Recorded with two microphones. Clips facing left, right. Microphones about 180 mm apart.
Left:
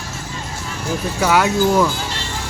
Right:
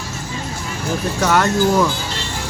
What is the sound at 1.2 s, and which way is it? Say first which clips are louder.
Speech: even; 10° left (ahead or behind).